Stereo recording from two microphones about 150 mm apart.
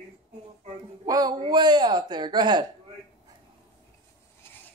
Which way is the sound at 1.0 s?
25° right (ahead or behind).